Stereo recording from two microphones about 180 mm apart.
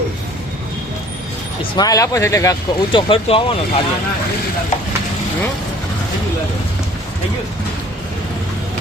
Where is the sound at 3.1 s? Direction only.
30° left (ahead or behind).